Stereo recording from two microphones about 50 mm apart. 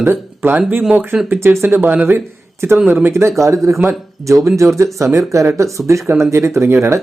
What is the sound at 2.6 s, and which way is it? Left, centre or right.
Speech, right.